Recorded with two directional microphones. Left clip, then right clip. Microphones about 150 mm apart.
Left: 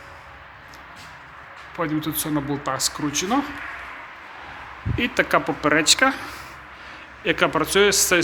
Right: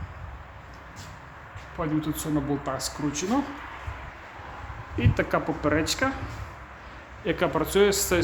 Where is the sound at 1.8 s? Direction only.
25° left (ahead or behind).